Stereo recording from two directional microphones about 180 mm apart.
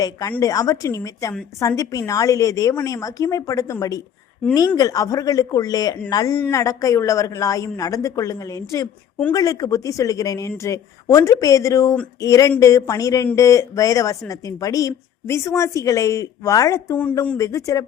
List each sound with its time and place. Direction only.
0.0 s a woman's voice: 15° left (ahead or behind)